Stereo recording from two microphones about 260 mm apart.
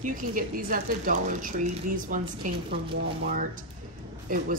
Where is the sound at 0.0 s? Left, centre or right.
Right.